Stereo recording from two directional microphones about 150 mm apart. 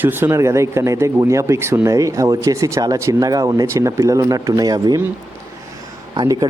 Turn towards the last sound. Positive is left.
turn(degrees=-25)  # may be behind; listen again after turning